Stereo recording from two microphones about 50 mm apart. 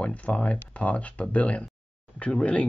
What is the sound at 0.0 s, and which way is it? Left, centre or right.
Speech, left.